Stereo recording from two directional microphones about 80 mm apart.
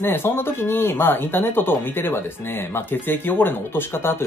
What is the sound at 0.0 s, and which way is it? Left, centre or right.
Speech, left.